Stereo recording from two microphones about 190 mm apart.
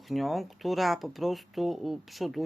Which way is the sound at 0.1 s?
Centre (ahead or behind).